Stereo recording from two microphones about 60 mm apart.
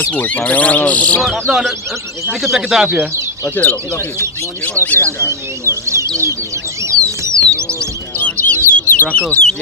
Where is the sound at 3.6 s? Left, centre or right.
Left.